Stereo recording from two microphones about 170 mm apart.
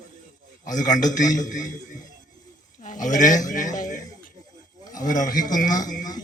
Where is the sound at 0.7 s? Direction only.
50° left (ahead or behind).